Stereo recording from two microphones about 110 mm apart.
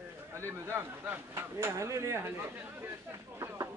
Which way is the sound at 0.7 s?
20° right (ahead or behind).